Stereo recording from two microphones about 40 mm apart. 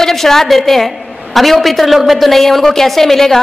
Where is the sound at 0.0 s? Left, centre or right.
Centre.